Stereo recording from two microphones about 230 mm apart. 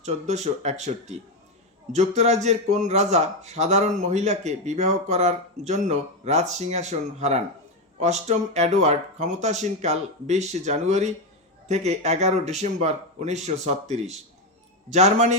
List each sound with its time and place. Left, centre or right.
0.0 s speech: right